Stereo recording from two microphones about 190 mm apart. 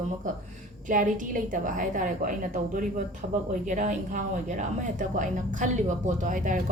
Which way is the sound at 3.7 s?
40° right (ahead or behind).